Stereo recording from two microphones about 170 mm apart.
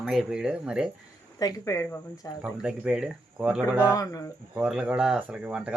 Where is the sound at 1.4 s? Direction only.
20° left (ahead or behind).